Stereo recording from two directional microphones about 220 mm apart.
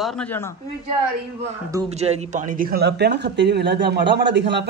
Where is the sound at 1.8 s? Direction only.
30° right (ahead or behind).